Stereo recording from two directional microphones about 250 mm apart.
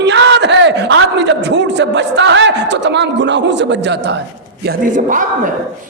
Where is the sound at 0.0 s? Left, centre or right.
Right.